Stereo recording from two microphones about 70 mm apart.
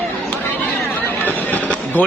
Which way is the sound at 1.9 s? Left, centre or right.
Left.